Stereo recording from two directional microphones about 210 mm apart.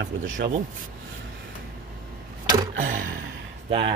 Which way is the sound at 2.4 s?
20° right (ahead or behind).